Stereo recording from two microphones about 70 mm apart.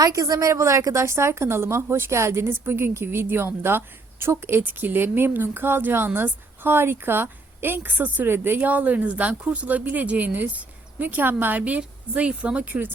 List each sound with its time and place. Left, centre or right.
0.0 s a woman's voice: right